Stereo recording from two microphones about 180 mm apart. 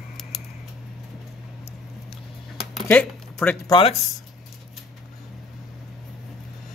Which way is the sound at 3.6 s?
25° left (ahead or behind).